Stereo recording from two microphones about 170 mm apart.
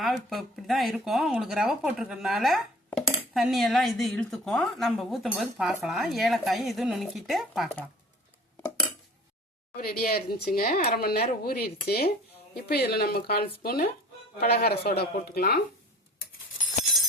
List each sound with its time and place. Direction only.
0.0 s a woman's voice: centre (ahead or behind)
9.7 s speech: 65° left (ahead or behind)